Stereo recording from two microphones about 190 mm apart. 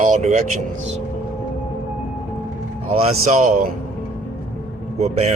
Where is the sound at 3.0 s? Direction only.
35° right (ahead or behind).